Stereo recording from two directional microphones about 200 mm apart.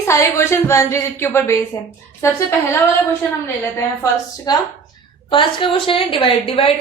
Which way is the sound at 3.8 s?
15° left (ahead or behind).